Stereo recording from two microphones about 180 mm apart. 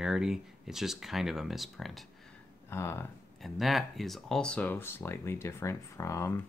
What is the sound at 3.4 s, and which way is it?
Speech, centre (ahead or behind).